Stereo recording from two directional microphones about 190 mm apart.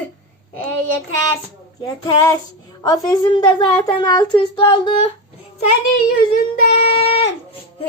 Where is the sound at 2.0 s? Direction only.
20° left (ahead or behind).